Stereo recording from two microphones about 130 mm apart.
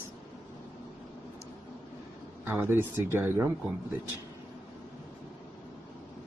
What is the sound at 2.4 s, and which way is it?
Speech, 15° right (ahead or behind).